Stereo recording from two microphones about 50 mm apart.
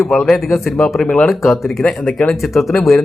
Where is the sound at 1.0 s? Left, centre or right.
Left.